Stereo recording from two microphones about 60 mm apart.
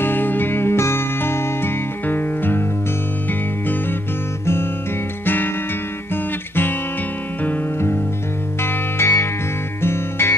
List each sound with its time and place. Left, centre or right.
0.0 s music: left
5.2 s music: left
8.9 s music: left